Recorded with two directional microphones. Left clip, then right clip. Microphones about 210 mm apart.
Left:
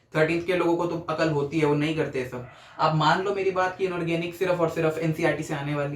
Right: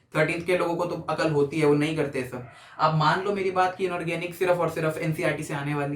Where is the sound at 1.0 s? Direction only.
20° right (ahead or behind).